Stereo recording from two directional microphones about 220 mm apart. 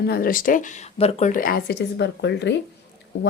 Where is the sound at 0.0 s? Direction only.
45° left (ahead or behind).